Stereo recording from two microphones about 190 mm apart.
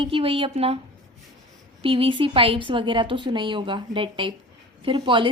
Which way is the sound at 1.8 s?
30° right (ahead or behind).